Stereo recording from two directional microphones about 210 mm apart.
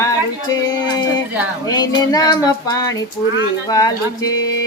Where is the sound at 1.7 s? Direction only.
20° left (ahead or behind).